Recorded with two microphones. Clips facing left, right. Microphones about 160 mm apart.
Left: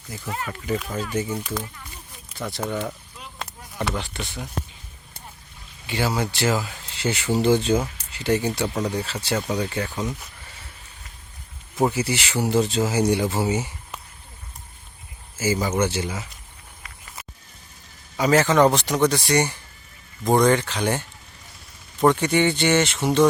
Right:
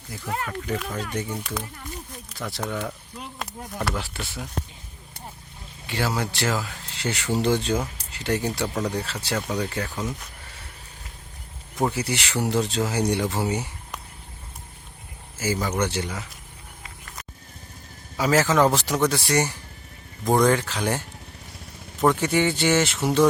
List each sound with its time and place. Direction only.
0.3 s speech: 55° right (ahead or behind)
0.6 s speech: 5° left (ahead or behind)
5.8 s speech: centre (ahead or behind)
11.8 s speech: 5° left (ahead or behind)
15.4 s speech: centre (ahead or behind)
18.2 s speech: 5° right (ahead or behind)
22.0 s speech: 5° right (ahead or behind)